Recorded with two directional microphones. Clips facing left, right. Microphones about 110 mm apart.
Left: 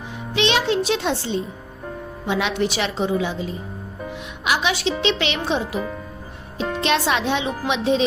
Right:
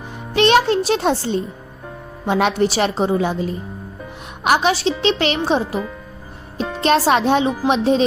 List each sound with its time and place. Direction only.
0.3 s a child's voice: 45° right (ahead or behind)
4.7 s a woman's voice: 35° right (ahead or behind)
6.6 s music: centre (ahead or behind)
6.8 s a woman's voice: 40° right (ahead or behind)